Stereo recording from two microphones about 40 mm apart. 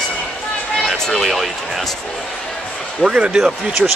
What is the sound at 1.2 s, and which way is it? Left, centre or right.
Speech, centre.